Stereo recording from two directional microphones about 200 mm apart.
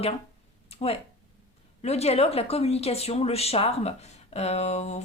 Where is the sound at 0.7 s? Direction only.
30° left (ahead or behind).